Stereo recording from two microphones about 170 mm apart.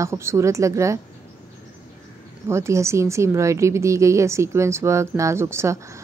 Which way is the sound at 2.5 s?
15° right (ahead or behind).